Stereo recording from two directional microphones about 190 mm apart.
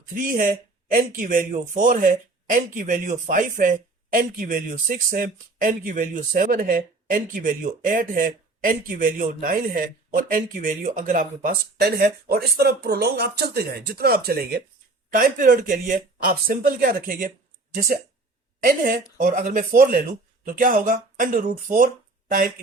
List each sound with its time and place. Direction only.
0.0 s speech: 45° right (ahead or behind)